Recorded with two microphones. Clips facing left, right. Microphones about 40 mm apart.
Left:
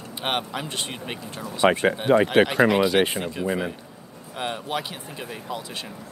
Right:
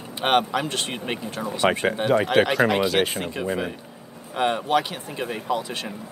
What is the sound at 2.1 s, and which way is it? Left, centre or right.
Speech, left.